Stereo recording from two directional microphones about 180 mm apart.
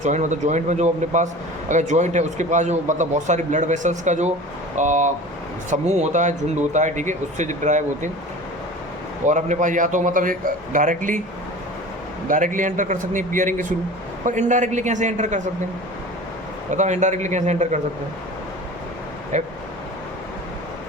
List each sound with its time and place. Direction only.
0.0 s a man's voice: 40° right (ahead or behind)
9.2 s a man's voice: 40° right (ahead or behind)
12.3 s a man's voice: 45° right (ahead or behind)
16.7 s a man's voice: 40° right (ahead or behind)
19.3 s a man's voice: 40° right (ahead or behind)